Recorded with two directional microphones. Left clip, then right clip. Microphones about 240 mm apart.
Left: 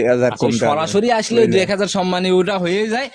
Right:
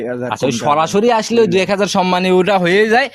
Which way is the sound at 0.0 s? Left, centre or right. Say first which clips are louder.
Left 7 dB; left.